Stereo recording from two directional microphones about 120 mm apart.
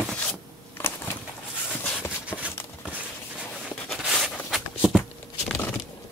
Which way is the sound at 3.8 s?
Centre (ahead or behind).